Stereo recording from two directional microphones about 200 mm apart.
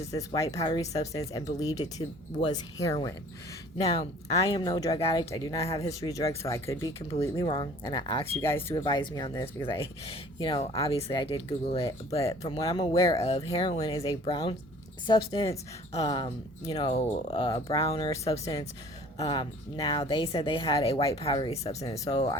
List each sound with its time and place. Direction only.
0.1 s speech: 15° left (ahead or behind)
4.3 s speech: 15° left (ahead or behind)
5.9 s speech: 15° left (ahead or behind)
7.1 s speech: 25° left (ahead or behind)
8.3 s speech: 10° left (ahead or behind)
8.8 s speech: 20° left (ahead or behind)
10.1 s speech: 25° left (ahead or behind)
13.1 s speech: 30° left (ahead or behind)
13.5 s speech: 20° left (ahead or behind)
19.2 s speech: 20° left (ahead or behind)